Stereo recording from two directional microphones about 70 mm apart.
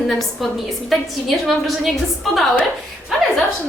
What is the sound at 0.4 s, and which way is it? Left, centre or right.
A woman's voice, centre.